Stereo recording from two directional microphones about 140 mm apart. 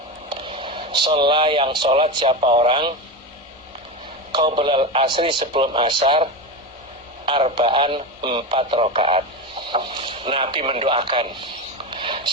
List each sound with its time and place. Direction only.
0.3 s speech: 35° right (ahead or behind)
4.3 s speech: 40° right (ahead or behind)
7.3 s speech: 40° right (ahead or behind)
11.9 s a sound: 35° right (ahead or behind)